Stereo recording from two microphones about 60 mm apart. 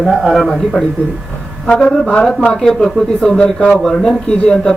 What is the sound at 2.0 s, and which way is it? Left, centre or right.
Speech, centre.